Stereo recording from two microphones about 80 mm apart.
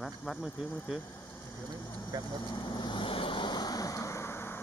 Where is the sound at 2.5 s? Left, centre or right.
Left.